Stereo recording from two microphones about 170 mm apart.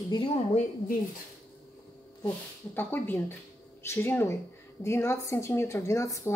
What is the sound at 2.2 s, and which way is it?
A woman's voice, 10° left (ahead or behind).